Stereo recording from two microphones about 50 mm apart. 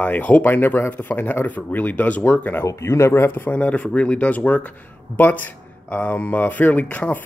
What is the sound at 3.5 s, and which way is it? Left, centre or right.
Speech, left.